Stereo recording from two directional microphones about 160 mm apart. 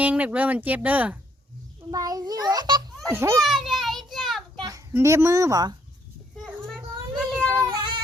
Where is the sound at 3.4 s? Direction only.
Centre (ahead or behind).